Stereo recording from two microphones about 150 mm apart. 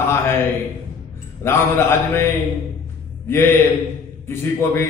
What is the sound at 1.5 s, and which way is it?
Speech, 15° left (ahead or behind).